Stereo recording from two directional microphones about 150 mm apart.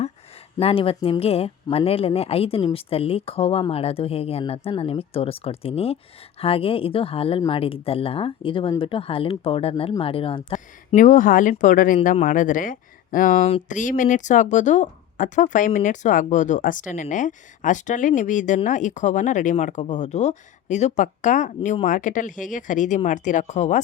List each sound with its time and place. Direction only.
0.6 s speech: 40° left (ahead or behind)
10.9 s a woman's voice: 65° left (ahead or behind)